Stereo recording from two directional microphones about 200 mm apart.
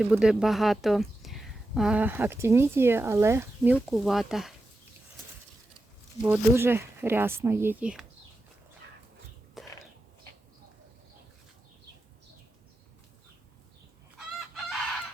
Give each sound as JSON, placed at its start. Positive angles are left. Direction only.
{"t": 0.0, "sound": "speech", "side_deg": -5}
{"t": 6.2, "sound": "speech", "side_deg": -10}
{"t": 9.6, "sound": "a sound", "side_deg": 0}